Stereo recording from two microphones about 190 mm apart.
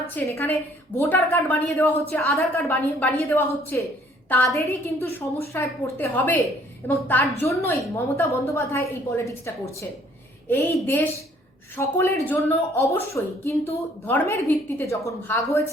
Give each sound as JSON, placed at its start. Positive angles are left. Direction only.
{"t": 0.1, "sound": "a woman's voice", "side_deg": 10}
{"t": 10.5, "sound": "a woman's voice", "side_deg": 10}